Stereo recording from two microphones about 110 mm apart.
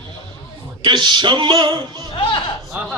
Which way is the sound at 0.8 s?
40° right (ahead or behind).